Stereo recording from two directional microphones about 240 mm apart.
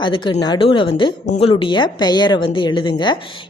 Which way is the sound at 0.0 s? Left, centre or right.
Centre.